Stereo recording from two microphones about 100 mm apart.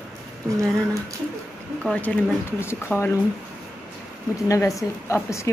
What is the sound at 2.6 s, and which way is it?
Speech, 25° left (ahead or behind).